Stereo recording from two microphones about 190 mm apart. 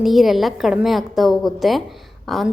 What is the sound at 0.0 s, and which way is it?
A woman's voice, centre (ahead or behind).